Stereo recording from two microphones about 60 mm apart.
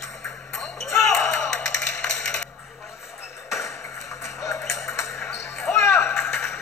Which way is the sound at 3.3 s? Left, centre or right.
Left.